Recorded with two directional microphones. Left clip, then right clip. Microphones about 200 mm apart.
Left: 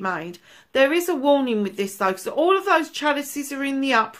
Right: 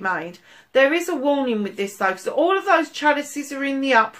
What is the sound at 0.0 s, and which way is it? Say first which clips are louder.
Speech: right 2 dB; 50° left (ahead or behind).